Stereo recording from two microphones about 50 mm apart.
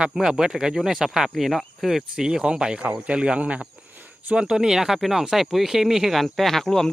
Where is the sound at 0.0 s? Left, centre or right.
Centre.